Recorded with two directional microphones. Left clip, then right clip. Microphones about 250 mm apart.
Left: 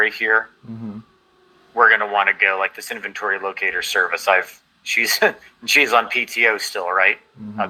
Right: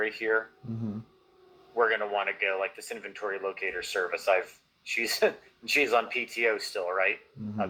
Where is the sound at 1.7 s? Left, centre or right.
Left.